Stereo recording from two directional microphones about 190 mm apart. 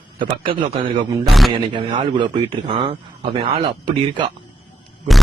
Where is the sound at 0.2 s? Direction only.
25° right (ahead or behind).